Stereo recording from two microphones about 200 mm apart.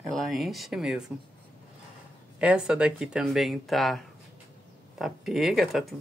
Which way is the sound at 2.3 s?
5° right (ahead or behind).